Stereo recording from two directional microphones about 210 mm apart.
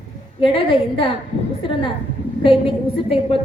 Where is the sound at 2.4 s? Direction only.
25° left (ahead or behind).